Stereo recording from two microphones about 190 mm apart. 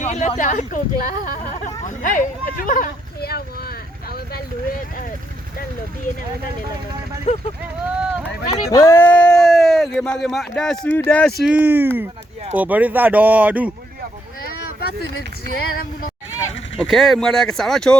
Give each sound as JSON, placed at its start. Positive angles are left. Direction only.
{"t": 0.0, "sound": "speech", "side_deg": 35}
{"t": 7.3, "sound": "speech", "side_deg": 35}
{"t": 8.1, "sound": "speech", "side_deg": -5}
{"t": 8.7, "sound": "speech", "side_deg": 15}
{"t": 14.8, "sound": "speech", "side_deg": 55}
{"t": 16.8, "sound": "speech", "side_deg": 0}